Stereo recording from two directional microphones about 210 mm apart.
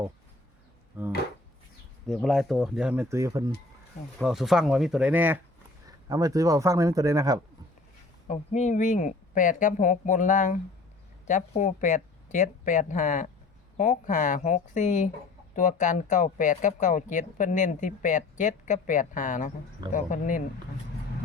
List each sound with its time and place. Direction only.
1.0 s speech: 10° right (ahead or behind)
4.2 s speech: centre (ahead or behind)
8.3 s speech: 35° left (ahead or behind)